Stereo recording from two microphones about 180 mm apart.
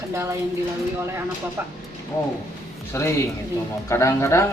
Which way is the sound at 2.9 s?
15° left (ahead or behind).